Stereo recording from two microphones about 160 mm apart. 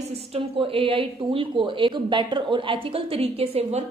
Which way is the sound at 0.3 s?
35° right (ahead or behind).